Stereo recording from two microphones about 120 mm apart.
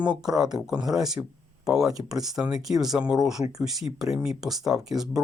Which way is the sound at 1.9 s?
30° right (ahead or behind).